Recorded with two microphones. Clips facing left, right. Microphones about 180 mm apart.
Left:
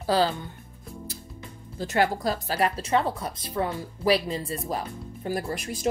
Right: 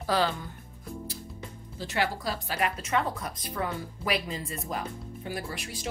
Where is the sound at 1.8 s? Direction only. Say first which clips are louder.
Left 6 dB; 45° left (ahead or behind).